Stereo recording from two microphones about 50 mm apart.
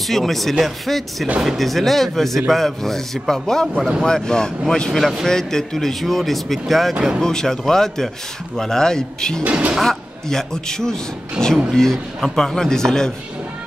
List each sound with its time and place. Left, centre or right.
0.0 s a man's voice: centre
3.6 s a man's voice: centre
4.0 s a man's voice: centre
9.4 s speech: right
9.8 s a man's voice: centre